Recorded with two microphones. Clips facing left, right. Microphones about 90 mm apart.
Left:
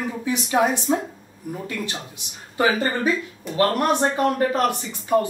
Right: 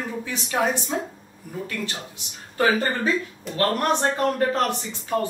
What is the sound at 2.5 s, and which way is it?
A man's voice, 15° left (ahead or behind).